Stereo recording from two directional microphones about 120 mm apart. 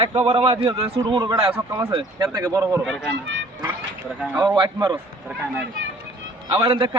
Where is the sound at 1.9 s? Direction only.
40° right (ahead or behind).